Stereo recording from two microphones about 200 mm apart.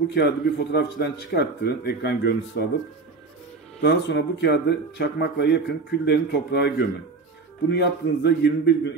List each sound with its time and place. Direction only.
0.1 s speech: 55° left (ahead or behind)
3.8 s speech: 55° left (ahead or behind)